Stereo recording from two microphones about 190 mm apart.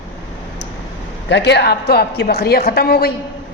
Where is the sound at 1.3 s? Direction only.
65° left (ahead or behind).